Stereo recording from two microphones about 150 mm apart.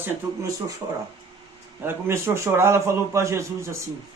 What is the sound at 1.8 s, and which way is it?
A man's voice, 15° right (ahead or behind).